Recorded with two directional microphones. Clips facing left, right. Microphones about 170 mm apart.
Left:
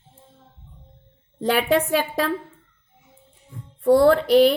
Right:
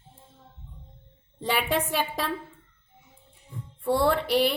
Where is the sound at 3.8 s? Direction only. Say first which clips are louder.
Left 8 dB; 45° left (ahead or behind).